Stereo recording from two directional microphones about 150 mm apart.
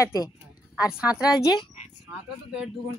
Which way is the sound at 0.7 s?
5° right (ahead or behind).